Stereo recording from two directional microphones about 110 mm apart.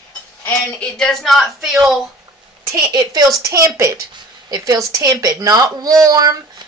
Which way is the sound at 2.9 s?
35° right (ahead or behind).